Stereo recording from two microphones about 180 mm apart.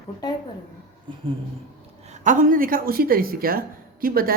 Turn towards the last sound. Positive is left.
turn(degrees=-55)  # may be behind; listen again after turning